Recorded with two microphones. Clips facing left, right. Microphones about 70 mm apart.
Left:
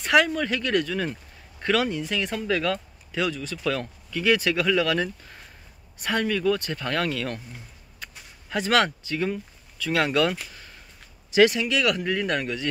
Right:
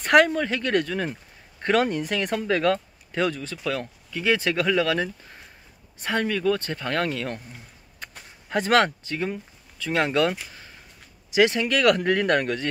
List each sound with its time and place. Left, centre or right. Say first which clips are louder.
0.0 s a sound: right 3 dB; right
0.3 s speech: right 1 dB; right
3.5 s speech: left 1 dB; centre
4.2 s speech: left 1 dB; right
8.5 s speech: right 2 dB; right
9.2 s speech: left 2 dB; right
11.5 s speech: right 4 dB; right